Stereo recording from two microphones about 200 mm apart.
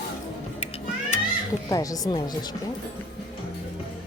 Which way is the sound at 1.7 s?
15° left (ahead or behind).